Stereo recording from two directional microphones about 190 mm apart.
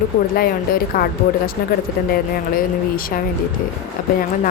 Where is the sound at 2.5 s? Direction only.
50° left (ahead or behind).